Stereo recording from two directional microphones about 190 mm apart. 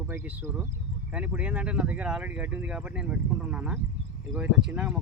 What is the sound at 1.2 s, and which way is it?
Speech, 5° right (ahead or behind).